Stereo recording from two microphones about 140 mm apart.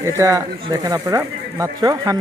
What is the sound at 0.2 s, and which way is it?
Speech, 25° right (ahead or behind).